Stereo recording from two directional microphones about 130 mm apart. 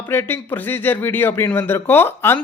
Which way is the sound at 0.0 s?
15° left (ahead or behind).